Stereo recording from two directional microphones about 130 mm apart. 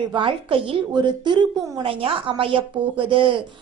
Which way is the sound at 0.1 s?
40° right (ahead or behind).